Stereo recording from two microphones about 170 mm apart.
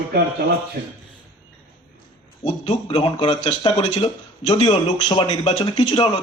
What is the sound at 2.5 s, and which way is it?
Speech, 35° left (ahead or behind).